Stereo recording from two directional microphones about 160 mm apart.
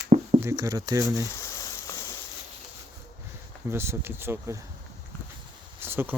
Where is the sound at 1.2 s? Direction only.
20° left (ahead or behind).